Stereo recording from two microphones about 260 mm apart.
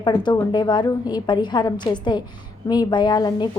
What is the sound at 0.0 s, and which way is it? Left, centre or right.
A woman's voice, centre.